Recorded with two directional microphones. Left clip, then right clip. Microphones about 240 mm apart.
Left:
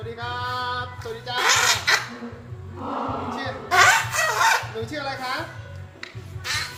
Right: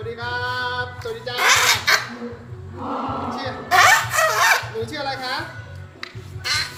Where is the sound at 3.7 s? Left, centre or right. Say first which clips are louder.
Right 3 dB; right.